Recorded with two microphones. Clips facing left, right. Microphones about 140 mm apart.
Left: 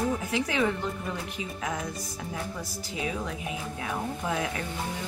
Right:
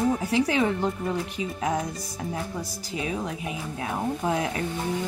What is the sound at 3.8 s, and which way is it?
Speech, 30° right (ahead or behind).